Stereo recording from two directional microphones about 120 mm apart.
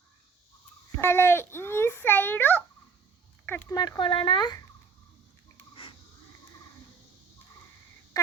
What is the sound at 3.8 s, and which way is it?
Speech, 40° left (ahead or behind).